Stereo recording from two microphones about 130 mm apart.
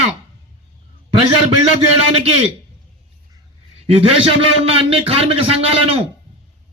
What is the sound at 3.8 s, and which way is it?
A man's voice, 45° right (ahead or behind).